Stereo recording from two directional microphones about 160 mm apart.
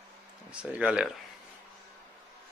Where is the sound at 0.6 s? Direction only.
5° right (ahead or behind).